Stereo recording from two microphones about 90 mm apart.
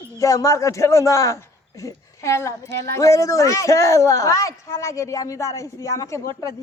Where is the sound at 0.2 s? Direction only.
40° left (ahead or behind).